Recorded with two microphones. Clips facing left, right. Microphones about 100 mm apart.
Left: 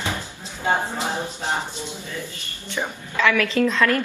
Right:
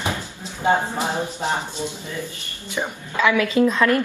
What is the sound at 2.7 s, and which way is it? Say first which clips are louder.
A woman's voice: right 1 dB; 15° right (ahead or behind).